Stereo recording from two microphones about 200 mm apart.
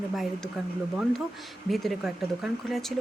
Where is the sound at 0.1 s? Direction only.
Centre (ahead or behind).